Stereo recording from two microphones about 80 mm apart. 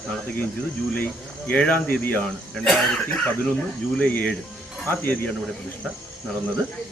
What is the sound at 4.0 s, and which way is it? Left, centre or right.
Speech, centre.